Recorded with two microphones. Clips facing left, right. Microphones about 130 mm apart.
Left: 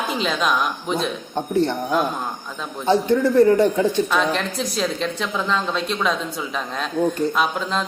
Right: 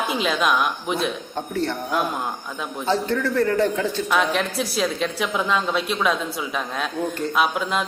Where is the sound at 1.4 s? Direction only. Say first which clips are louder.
Left 6 dB; 15° left (ahead or behind).